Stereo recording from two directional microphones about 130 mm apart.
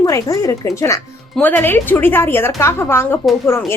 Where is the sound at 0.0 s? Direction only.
25° left (ahead or behind).